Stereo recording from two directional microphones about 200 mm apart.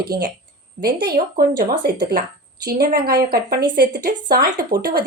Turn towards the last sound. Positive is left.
turn(degrees=-50)  # may be behind; listen again after turning